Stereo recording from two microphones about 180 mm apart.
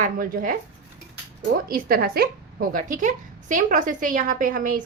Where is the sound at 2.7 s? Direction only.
45° right (ahead or behind).